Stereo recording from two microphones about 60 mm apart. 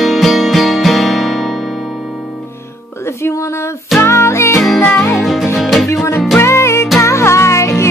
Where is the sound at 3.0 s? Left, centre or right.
Left.